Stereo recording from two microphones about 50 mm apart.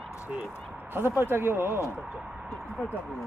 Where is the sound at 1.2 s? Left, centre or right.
Right.